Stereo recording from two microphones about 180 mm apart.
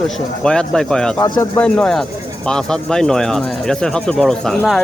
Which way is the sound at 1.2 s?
25° left (ahead or behind).